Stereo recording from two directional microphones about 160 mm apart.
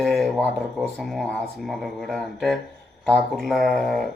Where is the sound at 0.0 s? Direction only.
Centre (ahead or behind).